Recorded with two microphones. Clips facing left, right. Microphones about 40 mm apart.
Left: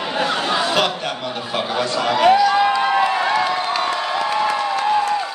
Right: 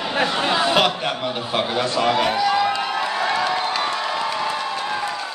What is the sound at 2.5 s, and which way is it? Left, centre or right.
Cheering, left.